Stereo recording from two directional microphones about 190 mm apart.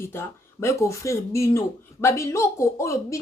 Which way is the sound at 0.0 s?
15° left (ahead or behind).